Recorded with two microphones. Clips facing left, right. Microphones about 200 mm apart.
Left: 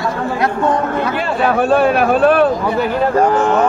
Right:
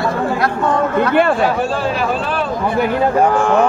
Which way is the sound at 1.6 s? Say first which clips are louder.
Left 6 dB; 60° left (ahead or behind).